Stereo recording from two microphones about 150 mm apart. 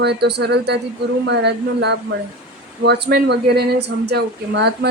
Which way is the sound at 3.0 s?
90° right.